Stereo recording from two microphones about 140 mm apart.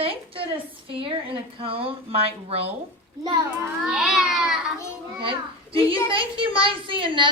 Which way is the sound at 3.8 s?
Centre (ahead or behind).